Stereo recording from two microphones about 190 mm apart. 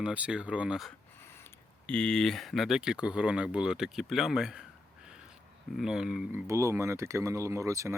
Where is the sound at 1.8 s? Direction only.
5° left (ahead or behind).